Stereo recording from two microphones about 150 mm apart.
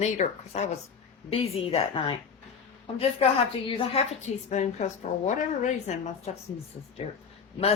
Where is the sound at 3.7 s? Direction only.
35° left (ahead or behind).